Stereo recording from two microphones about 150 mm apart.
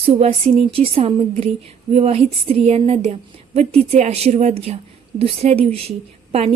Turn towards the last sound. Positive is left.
turn(degrees=-45)  # may be behind; listen again after turning